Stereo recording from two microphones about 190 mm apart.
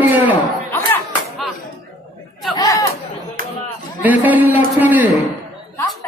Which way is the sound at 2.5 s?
20° left (ahead or behind).